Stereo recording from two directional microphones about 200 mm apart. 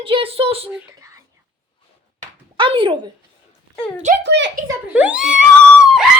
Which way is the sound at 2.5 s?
25° right (ahead or behind).